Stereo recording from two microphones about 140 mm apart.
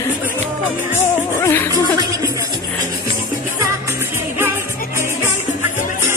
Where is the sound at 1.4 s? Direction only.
15° left (ahead or behind).